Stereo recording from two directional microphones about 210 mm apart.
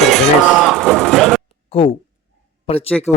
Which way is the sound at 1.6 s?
25° left (ahead or behind).